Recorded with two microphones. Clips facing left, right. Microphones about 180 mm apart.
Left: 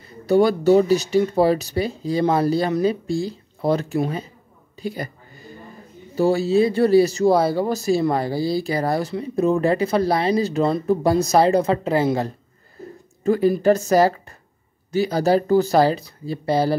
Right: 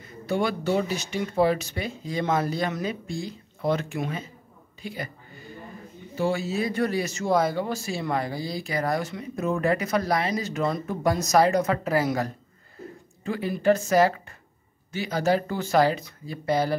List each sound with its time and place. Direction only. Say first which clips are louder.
0.3 s speech: left 10 dB; 40° left (ahead or behind)
6.1 s speech: left 9 dB; 35° left (ahead or behind)
13.2 s speech: left 9 dB; 40° left (ahead or behind)